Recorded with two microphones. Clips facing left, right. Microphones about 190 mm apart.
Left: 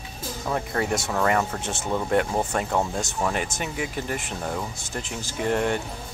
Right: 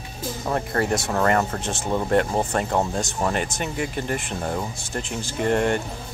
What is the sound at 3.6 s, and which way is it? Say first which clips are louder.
Speech: right 2 dB; 5° left (ahead or behind).